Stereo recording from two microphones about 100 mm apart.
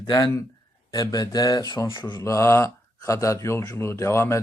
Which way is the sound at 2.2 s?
30° left (ahead or behind).